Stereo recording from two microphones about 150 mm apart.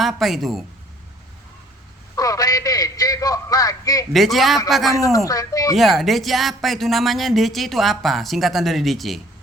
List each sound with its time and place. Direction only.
0.0 s speech: centre (ahead or behind)
2.1 s a man's voice: 25° left (ahead or behind)
4.1 s speech: centre (ahead or behind)
4.9 s speech: 20° left (ahead or behind)
5.7 s speech: centre (ahead or behind)